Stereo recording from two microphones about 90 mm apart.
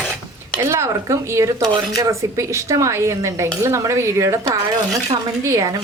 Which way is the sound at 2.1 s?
35° right (ahead or behind).